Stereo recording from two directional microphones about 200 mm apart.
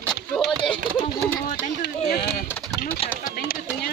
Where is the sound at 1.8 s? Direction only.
50° left (ahead or behind).